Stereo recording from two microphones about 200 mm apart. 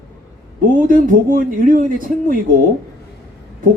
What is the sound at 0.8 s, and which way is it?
A man's voice, 40° right (ahead or behind).